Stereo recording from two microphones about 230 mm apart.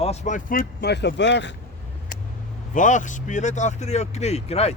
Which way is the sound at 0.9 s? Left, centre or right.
Left.